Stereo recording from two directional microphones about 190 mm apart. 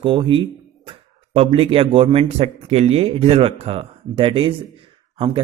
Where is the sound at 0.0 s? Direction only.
25° right (ahead or behind).